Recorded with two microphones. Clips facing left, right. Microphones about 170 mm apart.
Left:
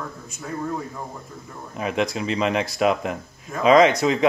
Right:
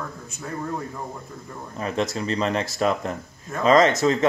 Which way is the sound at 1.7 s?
10° left (ahead or behind).